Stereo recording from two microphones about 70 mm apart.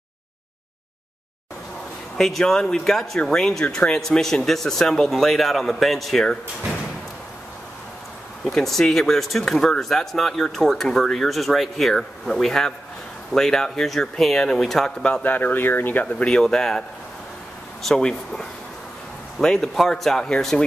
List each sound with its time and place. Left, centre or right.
2.1 s speech: centre
8.5 s speech: centre
15.2 s speech: left; by 16.8 s centre
17.8 s speech: centre